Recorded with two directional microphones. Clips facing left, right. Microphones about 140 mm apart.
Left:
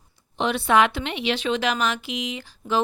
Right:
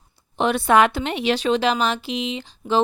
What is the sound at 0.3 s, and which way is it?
A woman's voice, 45° right (ahead or behind).